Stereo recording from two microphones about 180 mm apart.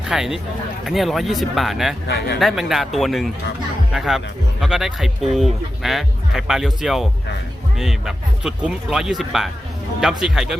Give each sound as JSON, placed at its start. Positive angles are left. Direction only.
{"t": 0.1, "sound": "speech", "side_deg": -5}
{"t": 2.0, "sound": "speech", "side_deg": 70}
{"t": 2.4, "sound": "speech", "side_deg": 0}